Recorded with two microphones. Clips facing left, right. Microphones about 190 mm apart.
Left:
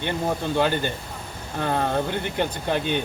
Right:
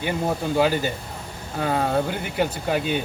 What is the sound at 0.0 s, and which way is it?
Speech, 5° right (ahead or behind).